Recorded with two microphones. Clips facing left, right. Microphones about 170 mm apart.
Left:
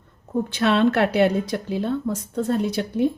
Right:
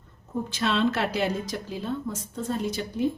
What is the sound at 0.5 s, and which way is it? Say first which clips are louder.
Speech: left 6 dB; 60° left (ahead or behind).